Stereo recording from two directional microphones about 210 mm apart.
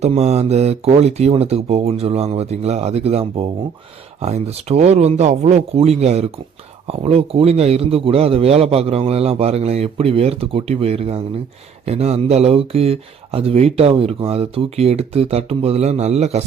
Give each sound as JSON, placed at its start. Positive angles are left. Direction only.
{"t": 0.0, "sound": "speech", "side_deg": -30}